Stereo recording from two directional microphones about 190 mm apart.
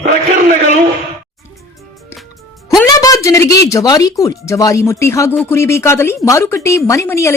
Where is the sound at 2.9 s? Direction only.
20° left (ahead or behind).